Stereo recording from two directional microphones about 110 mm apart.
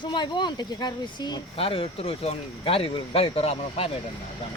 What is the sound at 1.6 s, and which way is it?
Speech, 55° left (ahead or behind).